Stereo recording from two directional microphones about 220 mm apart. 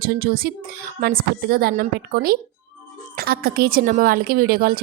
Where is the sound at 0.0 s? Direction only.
40° right (ahead or behind).